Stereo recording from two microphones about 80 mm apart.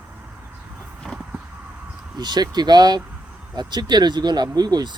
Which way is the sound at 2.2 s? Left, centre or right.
Right.